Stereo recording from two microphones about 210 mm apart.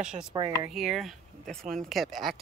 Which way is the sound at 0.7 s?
Centre (ahead or behind).